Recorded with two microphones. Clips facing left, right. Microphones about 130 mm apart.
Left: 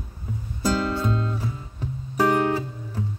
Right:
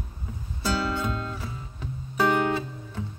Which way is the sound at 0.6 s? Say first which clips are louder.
Left 3 dB; 35° left (ahead or behind).